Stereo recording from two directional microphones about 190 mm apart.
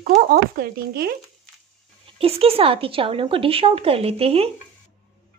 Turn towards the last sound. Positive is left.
turn(degrees=-30)  # may be behind; listen again after turning